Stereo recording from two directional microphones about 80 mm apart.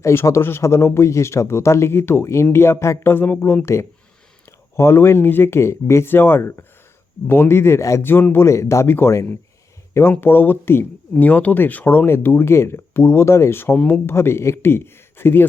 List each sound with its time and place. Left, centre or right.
0.0 s speech: left
8.0 s speech: left